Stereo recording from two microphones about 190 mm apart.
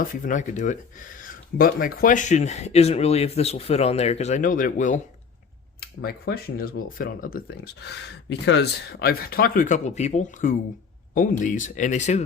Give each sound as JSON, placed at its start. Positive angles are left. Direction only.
{"t": 0.0, "sound": "speech", "side_deg": 45}
{"t": 6.0, "sound": "speech", "side_deg": 55}